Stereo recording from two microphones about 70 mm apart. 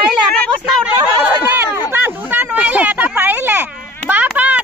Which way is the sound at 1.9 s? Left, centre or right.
Right.